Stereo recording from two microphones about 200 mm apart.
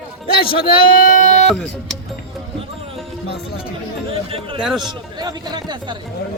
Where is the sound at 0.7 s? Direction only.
45° left (ahead or behind).